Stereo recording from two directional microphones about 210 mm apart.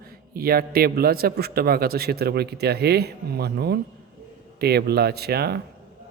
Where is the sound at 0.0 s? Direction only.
45° right (ahead or behind).